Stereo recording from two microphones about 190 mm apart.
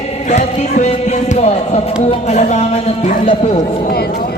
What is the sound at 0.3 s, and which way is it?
Speech, 35° left (ahead or behind).